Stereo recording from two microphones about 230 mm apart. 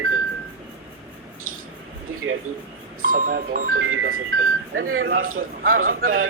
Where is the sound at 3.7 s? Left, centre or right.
Right.